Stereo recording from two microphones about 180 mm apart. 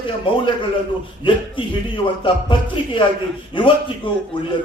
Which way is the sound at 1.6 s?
30° left (ahead or behind).